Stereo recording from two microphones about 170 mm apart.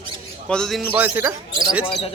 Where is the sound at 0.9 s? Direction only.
10° right (ahead or behind).